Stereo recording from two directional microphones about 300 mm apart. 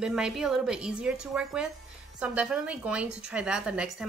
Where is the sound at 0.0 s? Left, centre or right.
Centre.